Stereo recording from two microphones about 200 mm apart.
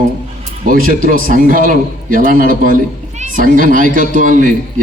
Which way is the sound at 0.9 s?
45° right (ahead or behind).